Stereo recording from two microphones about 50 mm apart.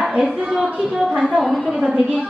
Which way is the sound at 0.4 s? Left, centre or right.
Centre.